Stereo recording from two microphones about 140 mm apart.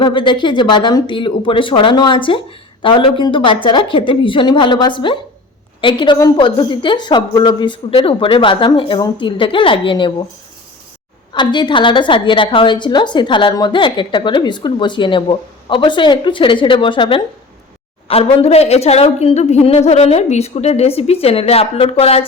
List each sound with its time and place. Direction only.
0.0 s a woman's voice: 35° left (ahead or behind)
11.3 s a woman's voice: 35° left (ahead or behind)
18.1 s a woman's voice: 45° left (ahead or behind)